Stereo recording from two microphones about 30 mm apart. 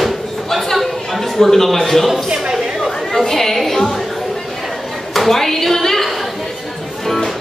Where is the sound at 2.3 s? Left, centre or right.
Right.